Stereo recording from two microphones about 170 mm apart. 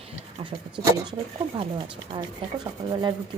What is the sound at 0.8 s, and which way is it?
Speech, 30° right (ahead or behind).